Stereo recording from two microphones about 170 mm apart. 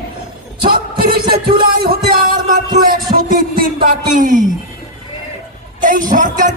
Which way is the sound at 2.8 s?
60° right (ahead or behind).